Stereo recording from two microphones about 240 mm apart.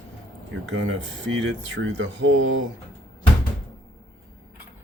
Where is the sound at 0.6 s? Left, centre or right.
Right.